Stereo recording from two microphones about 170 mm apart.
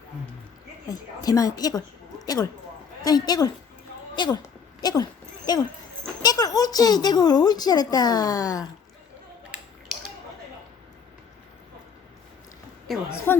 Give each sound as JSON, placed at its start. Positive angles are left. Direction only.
{"t": 0.9, "sound": "speech", "side_deg": 20}
{"t": 9.5, "sound": "typing", "side_deg": -5}
{"t": 12.9, "sound": "a woman's voice", "side_deg": 0}
{"t": 13.3, "sound": "a woman's voice", "side_deg": 10}